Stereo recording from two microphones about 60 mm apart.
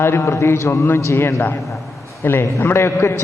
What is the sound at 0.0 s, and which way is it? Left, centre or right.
A man's voice, left.